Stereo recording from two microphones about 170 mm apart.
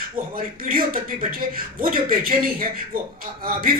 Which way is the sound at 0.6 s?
55° right (ahead or behind).